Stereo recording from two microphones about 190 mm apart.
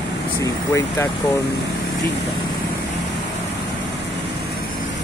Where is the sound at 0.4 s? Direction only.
15° left (ahead or behind).